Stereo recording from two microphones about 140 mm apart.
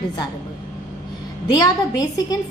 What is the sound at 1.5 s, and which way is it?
Speech, 30° left (ahead or behind).